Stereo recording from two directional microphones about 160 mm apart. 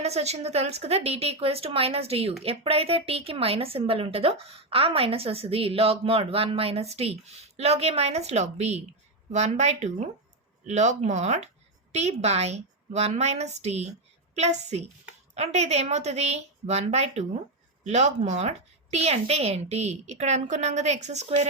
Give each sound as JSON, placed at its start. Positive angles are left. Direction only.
{"t": 0.0, "sound": "a woman's voice", "side_deg": -40}